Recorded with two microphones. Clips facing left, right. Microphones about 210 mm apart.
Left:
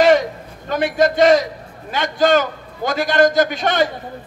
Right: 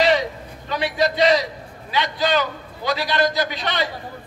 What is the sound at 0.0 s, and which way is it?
A man's voice, 50° left (ahead or behind).